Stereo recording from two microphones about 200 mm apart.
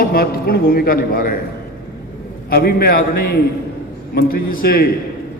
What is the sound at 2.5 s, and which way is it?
A man's voice, 50° left (ahead or behind).